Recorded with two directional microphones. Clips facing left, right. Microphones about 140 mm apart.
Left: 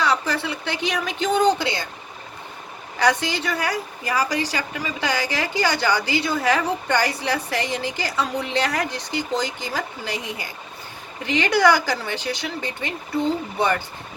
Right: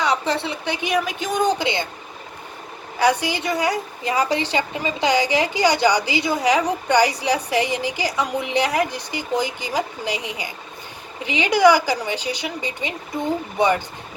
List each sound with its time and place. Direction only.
0.0 s a woman's voice: 20° right (ahead or behind)
3.0 s a woman's voice: 15° right (ahead or behind)